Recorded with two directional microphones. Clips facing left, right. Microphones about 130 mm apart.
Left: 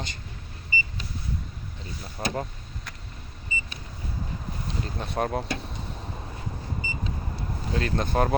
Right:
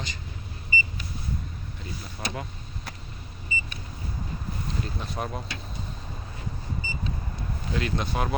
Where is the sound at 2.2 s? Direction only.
35° left (ahead or behind).